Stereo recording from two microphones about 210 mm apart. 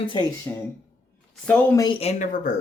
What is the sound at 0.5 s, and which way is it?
Speech, 15° left (ahead or behind).